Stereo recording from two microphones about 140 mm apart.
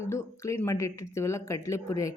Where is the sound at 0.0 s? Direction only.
20° left (ahead or behind).